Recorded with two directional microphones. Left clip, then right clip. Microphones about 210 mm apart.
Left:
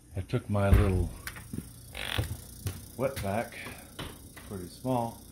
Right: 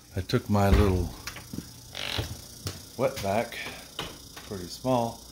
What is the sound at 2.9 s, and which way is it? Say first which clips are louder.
Speech: right 5 dB; 15° right (ahead or behind).